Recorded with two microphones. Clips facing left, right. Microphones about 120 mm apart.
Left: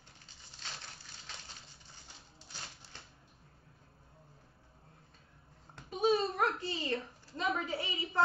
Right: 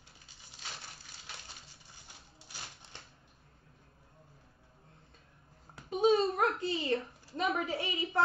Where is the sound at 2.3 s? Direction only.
10° right (ahead or behind).